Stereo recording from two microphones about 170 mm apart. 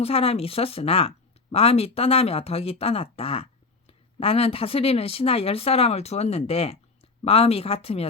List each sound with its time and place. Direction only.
0.0 s speech: 35° left (ahead or behind)